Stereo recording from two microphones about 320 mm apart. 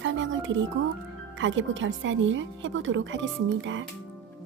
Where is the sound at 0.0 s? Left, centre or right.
Right.